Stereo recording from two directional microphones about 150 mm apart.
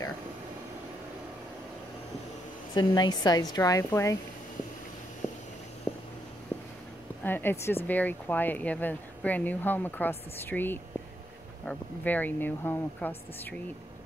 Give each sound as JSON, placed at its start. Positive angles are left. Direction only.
{"t": 2.7, "sound": "a woman's voice", "side_deg": 30}
{"t": 5.9, "sound": "a sound", "side_deg": 10}
{"t": 7.2, "sound": "speech", "side_deg": 15}